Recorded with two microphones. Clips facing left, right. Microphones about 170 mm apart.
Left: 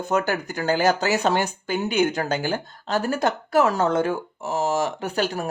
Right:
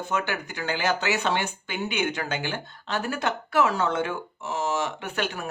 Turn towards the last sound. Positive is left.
turn(degrees=35)  # may be behind; listen again after turning